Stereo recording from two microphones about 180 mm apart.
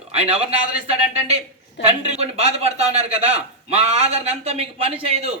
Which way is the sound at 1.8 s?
35° right (ahead or behind).